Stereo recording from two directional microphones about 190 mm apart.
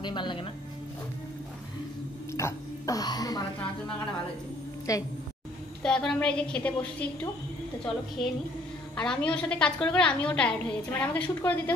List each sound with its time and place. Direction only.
0.0 s speech: 25° left (ahead or behind)
2.3 s a sound: 15° left (ahead or behind)
4.9 s a woman's voice: 15° left (ahead or behind)
5.8 s a woman's voice: 5° left (ahead or behind)
8.9 s a woman's voice: 5° left (ahead or behind)